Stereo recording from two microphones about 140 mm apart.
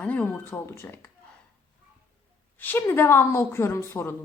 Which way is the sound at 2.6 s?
15° left (ahead or behind).